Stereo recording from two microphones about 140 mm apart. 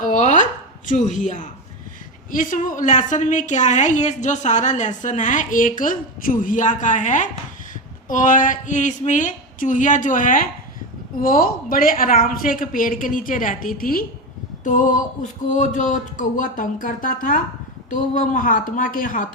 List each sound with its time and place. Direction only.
0.0 s a sound: 60° left (ahead or behind)
0.9 s a woman's voice: 65° left (ahead or behind)
11.2 s a woman's voice: 85° left
14.6 s speech: 65° left (ahead or behind)